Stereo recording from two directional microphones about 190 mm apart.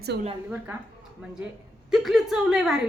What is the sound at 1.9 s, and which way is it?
Speech, centre (ahead or behind).